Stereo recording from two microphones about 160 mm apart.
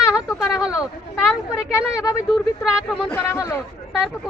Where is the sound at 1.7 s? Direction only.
20° left (ahead or behind).